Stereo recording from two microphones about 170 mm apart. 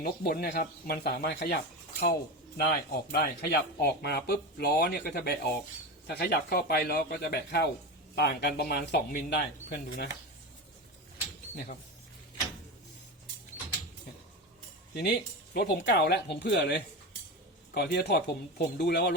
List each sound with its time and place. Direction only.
0.0 s speech: 65° left (ahead or behind)
9.7 s speech: 55° left (ahead or behind)
11.5 s speech: 60° left (ahead or behind)
14.9 s speech: 75° left (ahead or behind)
17.7 s speech: 70° left (ahead or behind)